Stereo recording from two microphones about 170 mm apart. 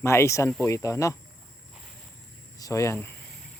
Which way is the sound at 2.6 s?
20° left (ahead or behind).